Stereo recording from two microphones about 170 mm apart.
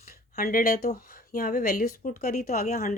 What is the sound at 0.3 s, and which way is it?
Speech, 60° left (ahead or behind).